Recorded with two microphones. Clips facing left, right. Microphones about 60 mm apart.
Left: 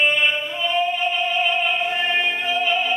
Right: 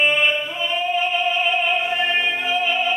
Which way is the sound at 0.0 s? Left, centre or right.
Centre.